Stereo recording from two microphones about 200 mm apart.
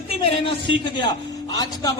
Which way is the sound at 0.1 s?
25° left (ahead or behind).